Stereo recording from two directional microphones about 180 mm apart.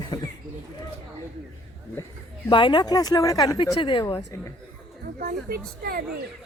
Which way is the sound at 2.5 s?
25° left (ahead or behind).